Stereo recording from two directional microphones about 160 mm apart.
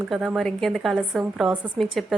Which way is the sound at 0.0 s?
5° right (ahead or behind).